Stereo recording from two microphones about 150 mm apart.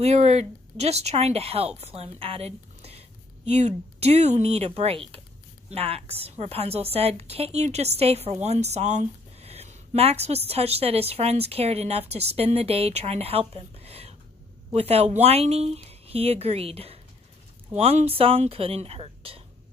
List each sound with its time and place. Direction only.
0.0 s a woman's voice: 45° right (ahead or behind)